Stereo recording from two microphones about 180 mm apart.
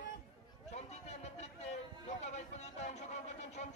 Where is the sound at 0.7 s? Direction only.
40° left (ahead or behind).